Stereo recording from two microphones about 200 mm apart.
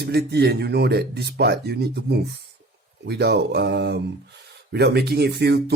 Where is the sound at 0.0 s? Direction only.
55° right (ahead or behind).